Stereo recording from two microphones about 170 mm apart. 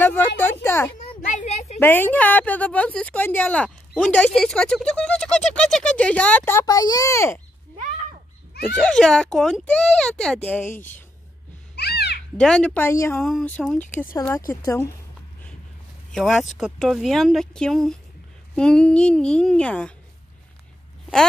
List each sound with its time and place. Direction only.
0.0 s speech: 10° left (ahead or behind)
0.4 s a sound: 15° left (ahead or behind)
0.9 s a sound: 45° left (ahead or behind)
1.8 s a woman's voice: 10° left (ahead or behind)
8.6 s speech: 5° left (ahead or behind)
11.7 s a sound: 75° left (ahead or behind)
12.4 s a woman's voice: 5° left (ahead or behind)
13.2 s speech: 5° left (ahead or behind)
14.1 s a woman's voice: 15° left (ahead or behind)
16.1 s speech: centre (ahead or behind)